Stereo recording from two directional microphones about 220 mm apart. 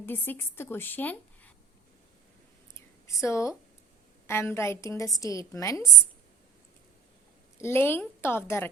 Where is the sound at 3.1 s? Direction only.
15° left (ahead or behind).